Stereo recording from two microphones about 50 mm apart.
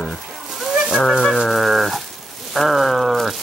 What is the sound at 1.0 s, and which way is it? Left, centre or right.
Speech, centre.